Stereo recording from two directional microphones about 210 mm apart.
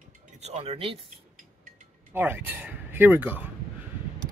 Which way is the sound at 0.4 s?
30° right (ahead or behind).